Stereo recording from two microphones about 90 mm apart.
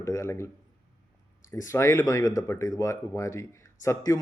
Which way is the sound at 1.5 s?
30° left (ahead or behind).